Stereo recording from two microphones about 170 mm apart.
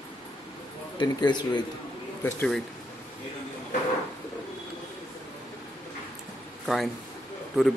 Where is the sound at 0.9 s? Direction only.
25° left (ahead or behind).